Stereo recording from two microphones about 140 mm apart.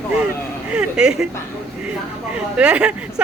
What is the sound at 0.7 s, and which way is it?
Speech, 5° right (ahead or behind).